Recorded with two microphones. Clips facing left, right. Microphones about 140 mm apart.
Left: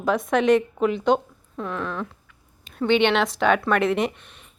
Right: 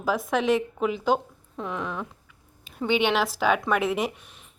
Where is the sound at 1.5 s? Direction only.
15° right (ahead or behind).